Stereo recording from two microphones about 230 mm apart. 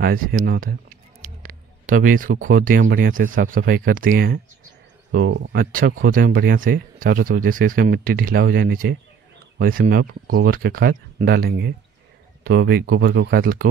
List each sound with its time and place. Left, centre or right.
0.0 s speech: right
5.1 s speech: right